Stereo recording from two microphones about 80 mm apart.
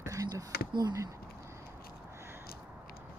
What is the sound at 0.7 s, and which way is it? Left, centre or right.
Speech, right.